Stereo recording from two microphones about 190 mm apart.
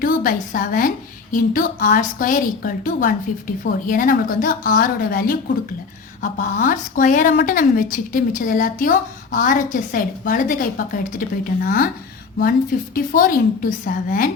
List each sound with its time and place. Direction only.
0.0 s a woman's voice: 45° left (ahead or behind)